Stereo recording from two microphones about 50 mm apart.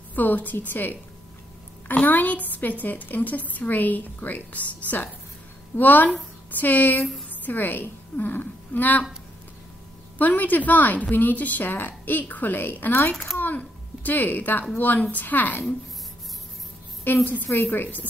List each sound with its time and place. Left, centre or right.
0.1 s a woman's voice: left
10.1 s speech: left
13.1 s speech: centre
13.6 s speech: left
17.0 s speech: left